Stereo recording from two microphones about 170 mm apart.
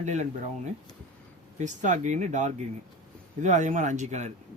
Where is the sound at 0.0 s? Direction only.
45° right (ahead or behind).